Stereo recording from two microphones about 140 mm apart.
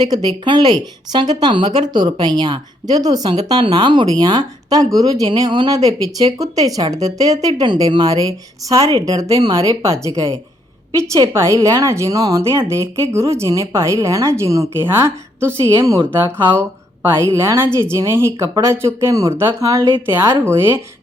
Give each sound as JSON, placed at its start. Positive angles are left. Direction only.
{"t": 0.0, "sound": "a woman's voice", "side_deg": -30}
{"t": 11.1, "sound": "a woman's voice", "side_deg": -20}
{"t": 20.4, "sound": "speech", "side_deg": -20}